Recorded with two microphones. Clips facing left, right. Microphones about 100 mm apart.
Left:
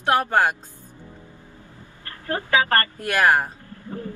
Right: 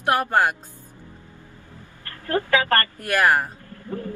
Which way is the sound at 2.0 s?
20° left (ahead or behind).